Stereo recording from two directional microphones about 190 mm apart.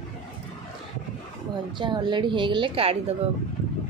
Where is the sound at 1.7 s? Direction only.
25° right (ahead or behind).